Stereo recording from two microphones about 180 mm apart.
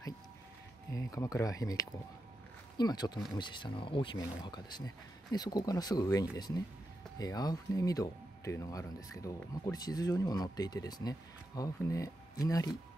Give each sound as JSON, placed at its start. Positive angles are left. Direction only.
{"t": 0.9, "sound": "speech", "side_deg": 20}